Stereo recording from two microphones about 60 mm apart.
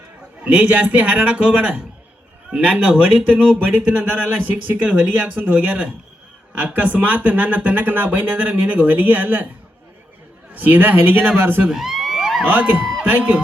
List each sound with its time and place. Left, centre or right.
0.4 s a man's voice: right
10.5 s a man's voice: right
11.7 s crowd: centre
12.5 s a man's voice: right